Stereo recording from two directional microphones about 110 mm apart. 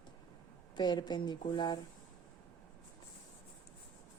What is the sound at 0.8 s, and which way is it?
Speech, 40° left (ahead or behind).